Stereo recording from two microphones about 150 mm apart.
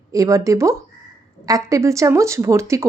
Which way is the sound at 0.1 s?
20° right (ahead or behind).